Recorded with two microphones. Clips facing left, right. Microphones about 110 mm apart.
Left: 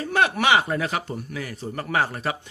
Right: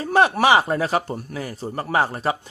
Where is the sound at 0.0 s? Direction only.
35° right (ahead or behind).